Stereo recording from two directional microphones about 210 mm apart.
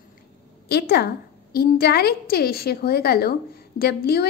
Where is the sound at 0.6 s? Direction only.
50° left (ahead or behind).